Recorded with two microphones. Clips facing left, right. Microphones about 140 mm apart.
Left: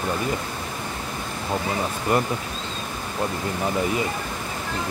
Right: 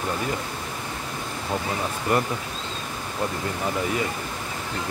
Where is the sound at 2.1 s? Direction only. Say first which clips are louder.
Left 1 dB; 20° left (ahead or behind).